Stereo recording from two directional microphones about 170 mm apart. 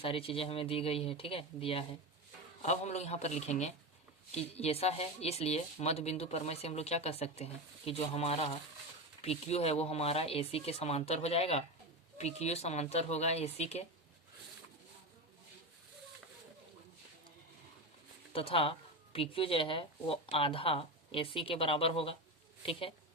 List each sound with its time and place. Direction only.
0.0 s speech: 35° left (ahead or behind)
18.3 s a woman's voice: 35° left (ahead or behind)